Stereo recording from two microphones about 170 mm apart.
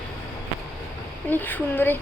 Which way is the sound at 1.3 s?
10° left (ahead or behind).